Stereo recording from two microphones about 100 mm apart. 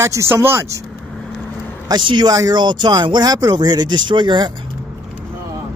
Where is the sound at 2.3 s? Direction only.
40° right (ahead or behind).